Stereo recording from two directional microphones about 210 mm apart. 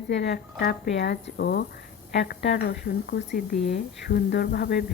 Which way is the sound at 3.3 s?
40° left (ahead or behind).